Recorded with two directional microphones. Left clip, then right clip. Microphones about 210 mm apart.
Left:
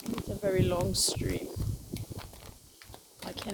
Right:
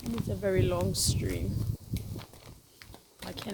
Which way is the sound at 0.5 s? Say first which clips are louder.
Left 1 dB; 5° left (ahead or behind).